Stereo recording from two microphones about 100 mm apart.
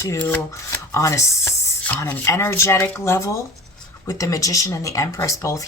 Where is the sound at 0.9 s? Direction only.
30° left (ahead or behind).